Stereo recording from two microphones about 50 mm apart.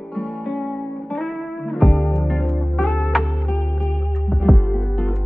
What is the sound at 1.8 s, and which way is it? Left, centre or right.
Music, centre.